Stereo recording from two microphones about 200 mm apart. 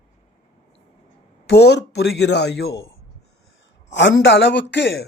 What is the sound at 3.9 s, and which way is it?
Speech, 65° left (ahead or behind).